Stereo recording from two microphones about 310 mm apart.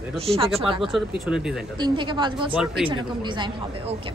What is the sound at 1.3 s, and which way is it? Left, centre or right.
Speech, centre.